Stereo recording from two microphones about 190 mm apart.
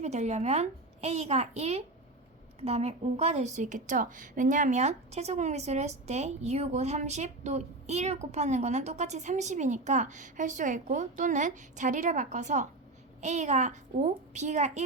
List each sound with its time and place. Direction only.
0.0 s a woman's voice: 35° right (ahead or behind)